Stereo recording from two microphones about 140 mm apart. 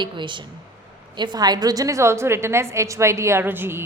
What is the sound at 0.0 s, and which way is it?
A woman's voice, 35° right (ahead or behind).